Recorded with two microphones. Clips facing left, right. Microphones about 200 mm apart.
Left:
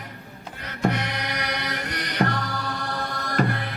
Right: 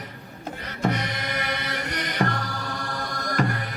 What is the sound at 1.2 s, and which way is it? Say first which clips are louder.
Music: even; 50° right (ahead or behind).